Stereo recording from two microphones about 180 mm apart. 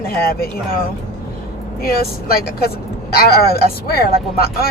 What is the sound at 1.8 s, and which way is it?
Speech, 55° left (ahead or behind).